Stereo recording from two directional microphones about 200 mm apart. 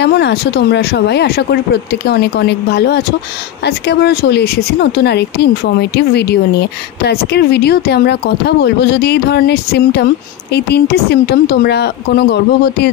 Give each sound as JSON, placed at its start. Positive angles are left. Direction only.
{"t": 0.0, "sound": "speech", "side_deg": 55}